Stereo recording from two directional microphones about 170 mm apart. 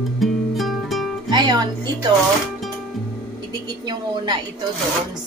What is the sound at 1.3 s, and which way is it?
Speech, 25° right (ahead or behind).